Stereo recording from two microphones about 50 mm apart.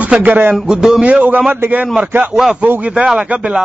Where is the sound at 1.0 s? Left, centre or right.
Right.